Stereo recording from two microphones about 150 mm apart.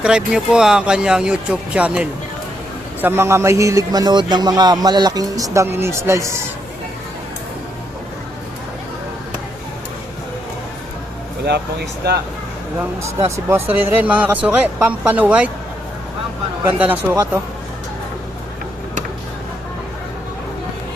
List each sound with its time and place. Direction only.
0.0 s a man's voice: 5° right (ahead or behind)
12.0 s speech: 90° right
13.5 s speech: 10° right (ahead or behind)
16.6 s speech: 10° right (ahead or behind)